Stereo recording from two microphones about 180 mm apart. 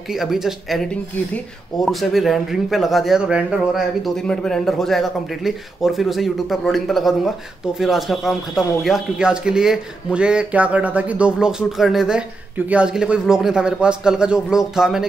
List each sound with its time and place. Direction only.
0.1 s speech: centre (ahead or behind)